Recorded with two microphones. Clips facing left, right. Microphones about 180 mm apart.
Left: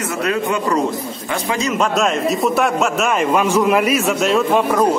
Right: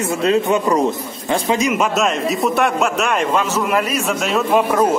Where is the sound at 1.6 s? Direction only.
10° right (ahead or behind).